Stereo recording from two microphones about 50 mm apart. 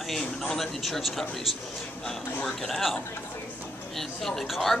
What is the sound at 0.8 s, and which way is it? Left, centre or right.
A man's voice, centre.